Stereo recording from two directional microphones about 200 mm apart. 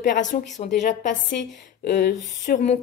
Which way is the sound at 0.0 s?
40° left (ahead or behind).